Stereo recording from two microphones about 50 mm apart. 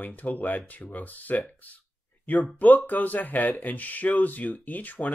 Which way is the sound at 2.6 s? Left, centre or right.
Left.